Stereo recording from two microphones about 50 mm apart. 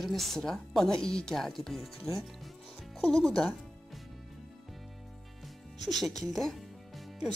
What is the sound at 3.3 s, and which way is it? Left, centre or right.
Speech, centre.